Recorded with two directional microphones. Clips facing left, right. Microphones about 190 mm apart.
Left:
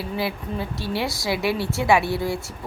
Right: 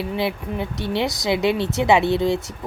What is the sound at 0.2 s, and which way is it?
A woman's voice, 20° right (ahead or behind).